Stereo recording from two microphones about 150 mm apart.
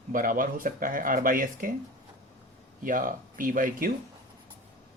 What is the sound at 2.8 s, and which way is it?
A man's voice, 65° right (ahead or behind).